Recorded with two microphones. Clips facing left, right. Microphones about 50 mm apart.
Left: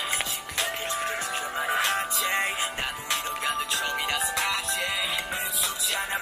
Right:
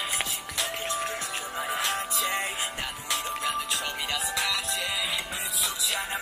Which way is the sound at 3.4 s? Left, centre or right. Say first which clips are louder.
Left 3 dB; left.